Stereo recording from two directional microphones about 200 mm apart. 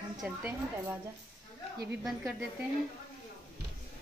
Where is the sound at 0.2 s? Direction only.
5° right (ahead or behind).